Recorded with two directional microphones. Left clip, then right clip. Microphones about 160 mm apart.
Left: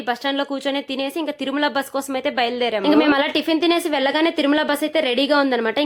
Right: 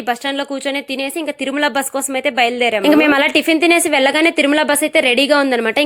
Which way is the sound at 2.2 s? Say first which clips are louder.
Right 7 dB; 15° right (ahead or behind).